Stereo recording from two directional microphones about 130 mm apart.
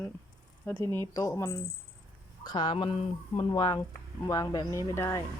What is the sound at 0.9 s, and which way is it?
Speech, 20° left (ahead or behind).